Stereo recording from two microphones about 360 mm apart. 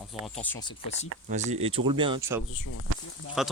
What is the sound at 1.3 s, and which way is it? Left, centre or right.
Speech, centre.